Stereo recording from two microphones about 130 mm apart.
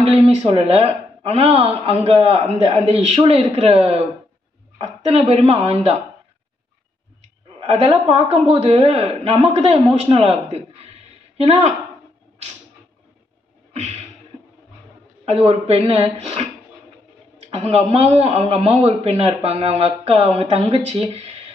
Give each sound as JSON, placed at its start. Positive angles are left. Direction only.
{"t": 0.0, "sound": "a man's voice", "side_deg": -50}
{"t": 7.6, "sound": "a man's voice", "side_deg": -50}
{"t": 13.7, "sound": "music", "side_deg": -60}
{"t": 15.2, "sound": "a man's voice", "side_deg": -45}
{"t": 17.6, "sound": "a man's voice", "side_deg": -50}